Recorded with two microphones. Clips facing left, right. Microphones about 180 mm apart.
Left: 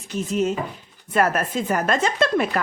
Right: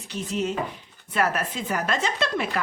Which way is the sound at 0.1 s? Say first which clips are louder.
Left 5 dB; 45° left (ahead or behind).